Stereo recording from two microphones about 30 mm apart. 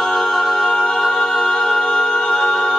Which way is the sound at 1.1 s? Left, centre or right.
Centre.